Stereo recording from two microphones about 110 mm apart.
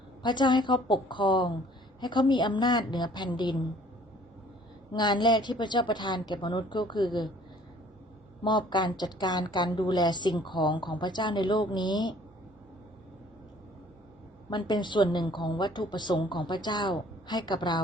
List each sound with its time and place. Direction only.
0.2 s a woman's voice: 40° left (ahead or behind)
4.9 s a woman's voice: 40° left (ahead or behind)
8.4 s a woman's voice: 45° left (ahead or behind)
14.5 s a woman's voice: 45° left (ahead or behind)